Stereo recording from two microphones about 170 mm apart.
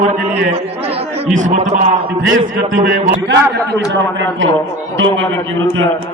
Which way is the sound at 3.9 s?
90° right.